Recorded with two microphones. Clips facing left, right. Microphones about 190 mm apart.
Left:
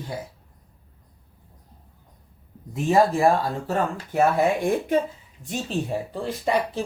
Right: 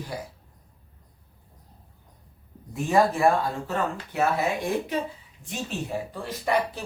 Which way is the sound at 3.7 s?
45° left (ahead or behind).